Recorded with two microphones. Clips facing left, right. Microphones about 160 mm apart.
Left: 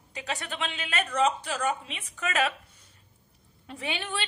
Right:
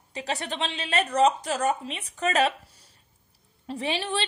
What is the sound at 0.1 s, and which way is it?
A woman's voice, 35° right (ahead or behind).